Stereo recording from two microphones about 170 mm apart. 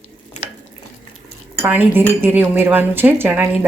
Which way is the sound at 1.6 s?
10° right (ahead or behind).